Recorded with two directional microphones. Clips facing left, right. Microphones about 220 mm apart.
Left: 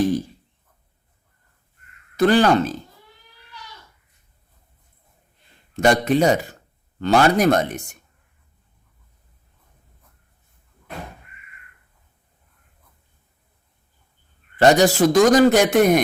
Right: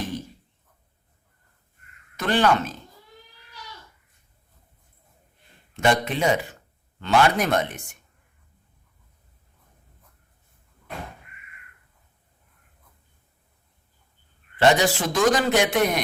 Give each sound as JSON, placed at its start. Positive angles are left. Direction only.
{"t": 2.1, "sound": "speech", "side_deg": 35}
{"t": 5.7, "sound": "a man's voice", "side_deg": 40}
{"t": 14.6, "sound": "a man's voice", "side_deg": 40}